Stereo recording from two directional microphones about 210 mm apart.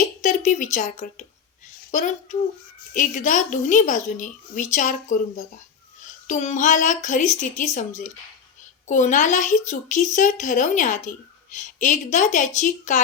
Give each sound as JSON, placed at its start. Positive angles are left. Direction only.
{"t": 0.2, "sound": "a woman's voice", "side_deg": 35}
{"t": 6.2, "sound": "a woman's voice", "side_deg": 35}